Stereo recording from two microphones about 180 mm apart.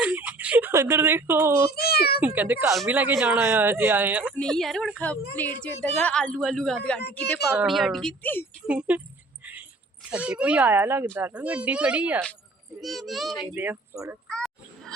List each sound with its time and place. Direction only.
0.0 s a sound: 10° right (ahead or behind)
1.7 s meow: 60° left (ahead or behind)
2.2 s speech: 10° right (ahead or behind)
4.4 s a woman's voice: 5° left (ahead or behind)
8.6 s speech: 5° right (ahead or behind)
9.4 s keys jangling: 10° right (ahead or behind)
10.1 s a woman's voice: 5° right (ahead or behind)
13.5 s speech: 10° right (ahead or behind)
14.3 s a sound: 5° left (ahead or behind)